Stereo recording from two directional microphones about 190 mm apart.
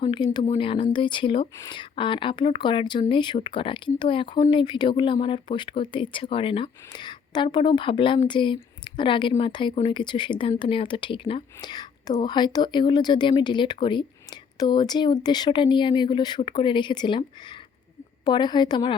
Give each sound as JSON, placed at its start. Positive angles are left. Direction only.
{"t": 0.0, "sound": "speech", "side_deg": 25}